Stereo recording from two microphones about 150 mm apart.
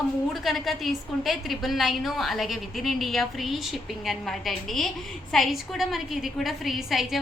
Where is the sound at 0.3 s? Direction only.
Centre (ahead or behind).